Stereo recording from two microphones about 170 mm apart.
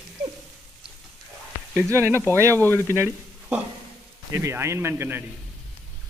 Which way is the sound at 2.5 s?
10° left (ahead or behind).